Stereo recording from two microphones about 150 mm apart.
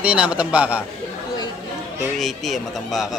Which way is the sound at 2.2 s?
Centre (ahead or behind).